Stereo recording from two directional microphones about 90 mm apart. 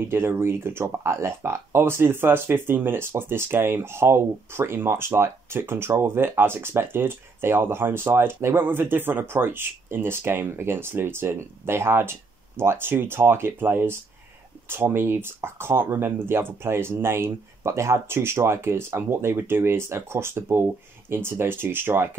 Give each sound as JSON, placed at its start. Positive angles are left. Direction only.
{"t": 0.1, "sound": "speech", "side_deg": -25}